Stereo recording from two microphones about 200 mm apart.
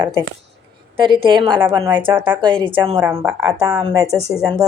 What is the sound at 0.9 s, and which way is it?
A woman's voice, 25° right (ahead or behind).